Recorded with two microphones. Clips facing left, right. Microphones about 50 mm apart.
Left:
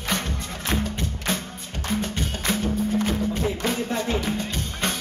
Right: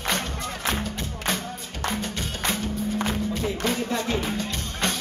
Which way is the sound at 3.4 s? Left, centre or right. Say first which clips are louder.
Left 1 dB; left.